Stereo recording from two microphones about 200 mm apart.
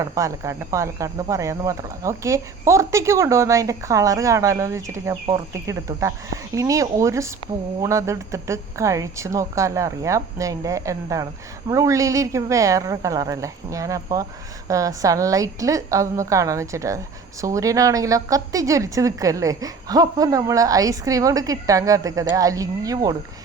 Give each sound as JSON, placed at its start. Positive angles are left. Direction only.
{"t": 0.0, "sound": "a woman's voice", "side_deg": -15}